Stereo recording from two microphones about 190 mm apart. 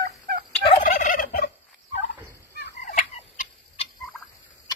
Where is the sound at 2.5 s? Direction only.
50° left (ahead or behind).